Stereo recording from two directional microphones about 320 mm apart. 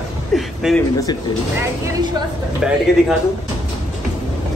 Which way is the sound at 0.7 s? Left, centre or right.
Centre.